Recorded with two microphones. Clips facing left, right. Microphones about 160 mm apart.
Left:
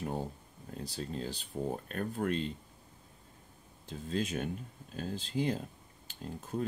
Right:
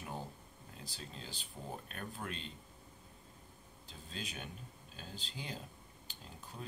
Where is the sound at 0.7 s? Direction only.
45° left (ahead or behind).